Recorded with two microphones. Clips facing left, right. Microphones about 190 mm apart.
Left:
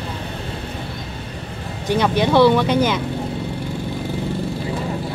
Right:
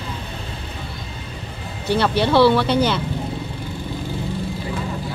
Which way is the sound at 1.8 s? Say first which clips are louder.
Left 1 dB; 15° left (ahead or behind).